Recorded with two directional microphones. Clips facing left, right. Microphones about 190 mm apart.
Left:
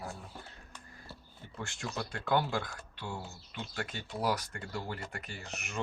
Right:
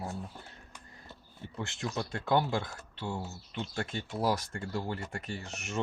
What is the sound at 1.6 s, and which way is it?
Speech, 20° right (ahead or behind).